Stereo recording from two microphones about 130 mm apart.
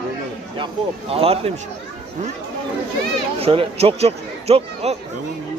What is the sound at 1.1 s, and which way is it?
Speech, 50° right (ahead or behind).